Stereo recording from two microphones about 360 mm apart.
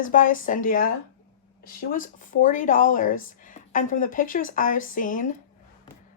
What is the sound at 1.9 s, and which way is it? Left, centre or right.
Speech, left.